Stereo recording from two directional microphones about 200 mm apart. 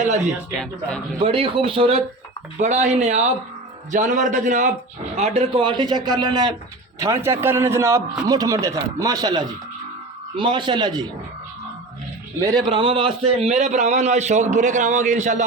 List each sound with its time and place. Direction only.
0.5 s speech: 5° left (ahead or behind)
1.2 s a man's voice: 25° right (ahead or behind)
12.6 s a man's voice: 25° right (ahead or behind)